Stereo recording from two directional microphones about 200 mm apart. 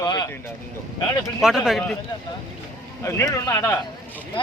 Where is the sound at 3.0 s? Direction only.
15° left (ahead or behind).